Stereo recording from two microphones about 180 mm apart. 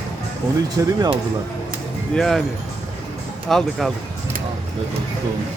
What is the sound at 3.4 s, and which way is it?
Speech, centre (ahead or behind).